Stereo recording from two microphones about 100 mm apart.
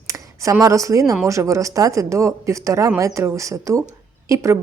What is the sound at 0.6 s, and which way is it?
Speech, 30° right (ahead or behind).